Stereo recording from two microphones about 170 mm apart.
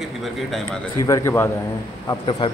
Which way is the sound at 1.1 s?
15° left (ahead or behind).